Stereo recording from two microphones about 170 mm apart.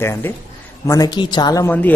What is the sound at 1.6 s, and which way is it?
Speech, 10° left (ahead or behind).